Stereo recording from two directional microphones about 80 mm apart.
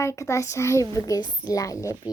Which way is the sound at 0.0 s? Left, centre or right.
Left.